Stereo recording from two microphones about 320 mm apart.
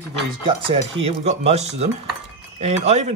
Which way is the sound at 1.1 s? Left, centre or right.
Centre.